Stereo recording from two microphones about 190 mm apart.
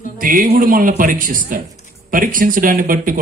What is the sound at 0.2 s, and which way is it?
A man's voice, 45° right (ahead or behind).